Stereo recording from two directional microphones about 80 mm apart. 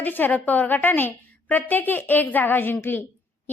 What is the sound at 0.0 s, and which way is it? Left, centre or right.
A woman's voice, left.